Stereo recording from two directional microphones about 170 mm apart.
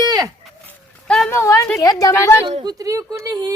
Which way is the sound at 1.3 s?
15° left (ahead or behind).